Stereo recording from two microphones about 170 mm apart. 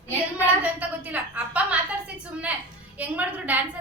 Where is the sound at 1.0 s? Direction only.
10° right (ahead or behind).